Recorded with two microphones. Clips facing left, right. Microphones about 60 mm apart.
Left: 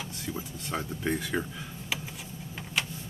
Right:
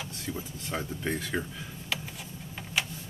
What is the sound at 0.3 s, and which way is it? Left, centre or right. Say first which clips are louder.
Speech: even; centre.